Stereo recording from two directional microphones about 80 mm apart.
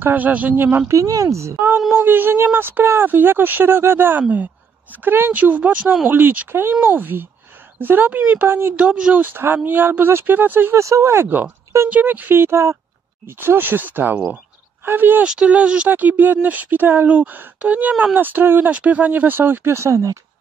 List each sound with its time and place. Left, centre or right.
0.0 s speech: right
0.8 s speech: right
2.0 s speech: right
8.7 s speech: centre
10.8 s speech: right
15.2 s speech: centre; by 20.2 s right